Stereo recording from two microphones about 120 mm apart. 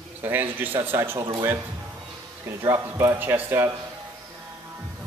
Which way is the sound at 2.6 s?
20° right (ahead or behind).